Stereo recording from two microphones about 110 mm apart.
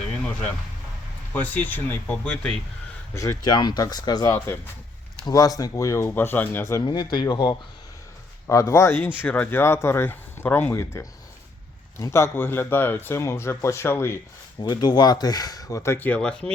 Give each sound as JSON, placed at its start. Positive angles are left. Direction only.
{"t": 1.3, "sound": "speech", "side_deg": 15}
{"t": 3.2, "sound": "speech", "side_deg": 35}
{"t": 4.4, "sound": "speech", "side_deg": 20}
{"t": 5.2, "sound": "speech", "side_deg": 35}
{"t": 6.8, "sound": "speech", "side_deg": 40}
{"t": 8.4, "sound": "speech", "side_deg": 25}
{"t": 14.6, "sound": "speech", "side_deg": 40}